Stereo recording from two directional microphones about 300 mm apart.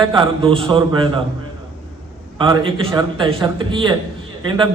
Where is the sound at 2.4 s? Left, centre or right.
Centre.